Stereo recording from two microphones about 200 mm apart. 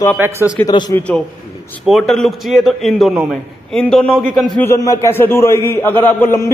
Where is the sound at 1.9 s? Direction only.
Centre (ahead or behind).